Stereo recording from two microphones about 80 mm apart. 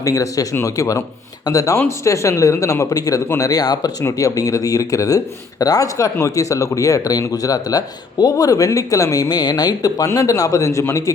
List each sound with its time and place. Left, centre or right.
0.0 s speech: left
4.0 s speech: left